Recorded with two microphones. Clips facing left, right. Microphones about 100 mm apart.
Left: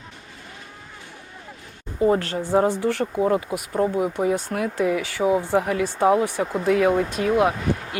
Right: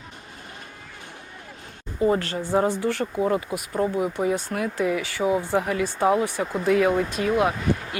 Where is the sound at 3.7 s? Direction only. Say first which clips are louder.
Left 2 dB; 30° left (ahead or behind).